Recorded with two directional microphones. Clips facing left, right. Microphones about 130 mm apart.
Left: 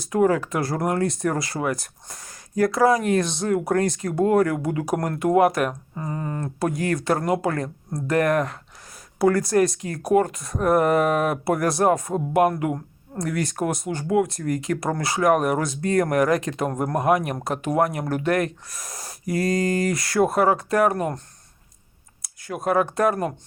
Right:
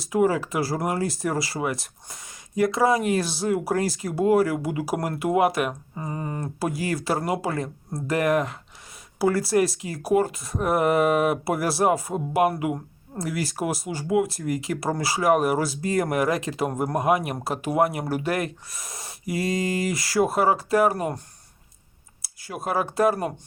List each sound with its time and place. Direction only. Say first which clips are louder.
0.0 s speech: left 2 dB; 5° right (ahead or behind)
5.9 s a sound: left 2 dB; 15° right (ahead or behind)
6.6 s speech: left 3 dB; 5° right (ahead or behind)
22.2 s speech: left 4 dB; 5° right (ahead or behind)